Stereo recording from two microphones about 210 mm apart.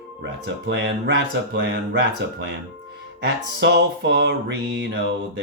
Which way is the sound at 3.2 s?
55° right (ahead or behind).